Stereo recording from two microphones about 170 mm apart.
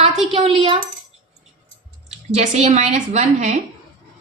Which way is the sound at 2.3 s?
40° right (ahead or behind).